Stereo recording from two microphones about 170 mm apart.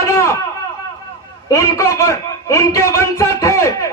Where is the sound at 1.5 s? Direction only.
20° left (ahead or behind).